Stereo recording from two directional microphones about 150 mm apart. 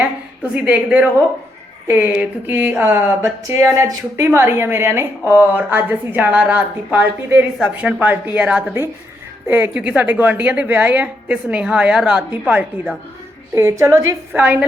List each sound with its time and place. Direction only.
0.0 s a woman's voice: 10° right (ahead or behind)
13.6 s a woman's voice: 20° right (ahead or behind)